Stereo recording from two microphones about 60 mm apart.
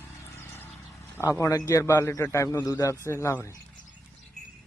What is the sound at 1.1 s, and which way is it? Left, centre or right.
A man's voice, left.